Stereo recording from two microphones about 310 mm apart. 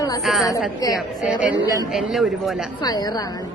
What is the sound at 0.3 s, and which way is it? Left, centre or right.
Speech, centre.